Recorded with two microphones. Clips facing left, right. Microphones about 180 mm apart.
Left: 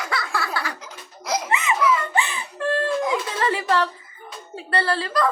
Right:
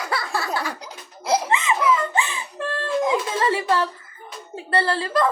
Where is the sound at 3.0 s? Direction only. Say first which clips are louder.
Right 2 dB; 25° right (ahead or behind).